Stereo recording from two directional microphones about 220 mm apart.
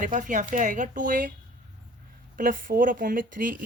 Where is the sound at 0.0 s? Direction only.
35° right (ahead or behind).